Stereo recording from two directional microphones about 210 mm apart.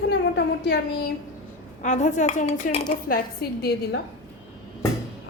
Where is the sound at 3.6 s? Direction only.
45° left (ahead or behind).